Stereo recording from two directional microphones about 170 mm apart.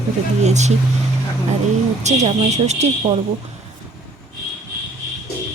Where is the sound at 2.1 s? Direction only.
40° right (ahead or behind).